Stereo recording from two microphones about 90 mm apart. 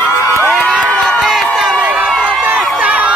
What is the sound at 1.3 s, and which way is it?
Crowd, centre (ahead or behind).